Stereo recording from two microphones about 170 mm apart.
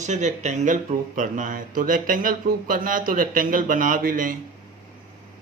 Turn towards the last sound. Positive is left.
turn(degrees=-55)  # may be behind; listen again after turning